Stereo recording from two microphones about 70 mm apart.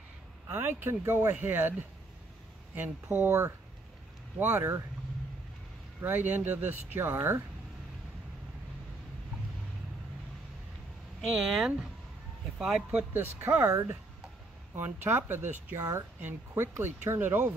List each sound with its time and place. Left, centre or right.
0.5 s speech: right
5.9 s speech: right
11.1 s speech: centre
13.1 s speech: right
13.6 s speech: right
14.8 s speech: right